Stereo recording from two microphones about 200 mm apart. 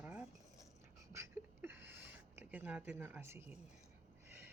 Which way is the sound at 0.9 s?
15° right (ahead or behind).